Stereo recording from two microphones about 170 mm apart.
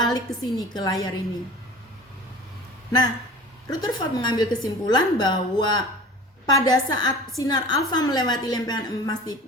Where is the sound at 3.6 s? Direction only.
20° left (ahead or behind).